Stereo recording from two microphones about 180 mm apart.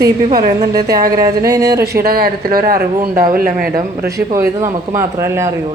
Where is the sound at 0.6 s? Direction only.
20° right (ahead or behind).